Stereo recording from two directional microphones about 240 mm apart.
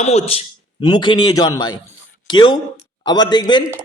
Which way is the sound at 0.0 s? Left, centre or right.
Left.